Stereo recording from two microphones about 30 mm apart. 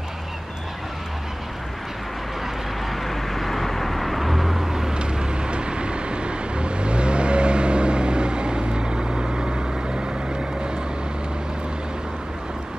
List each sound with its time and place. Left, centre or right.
2.9 s vehicle: centre
4.9 s vehicle: right